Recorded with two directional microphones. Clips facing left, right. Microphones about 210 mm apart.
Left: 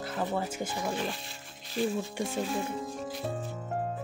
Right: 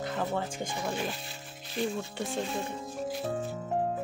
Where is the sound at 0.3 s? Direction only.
5° left (ahead or behind).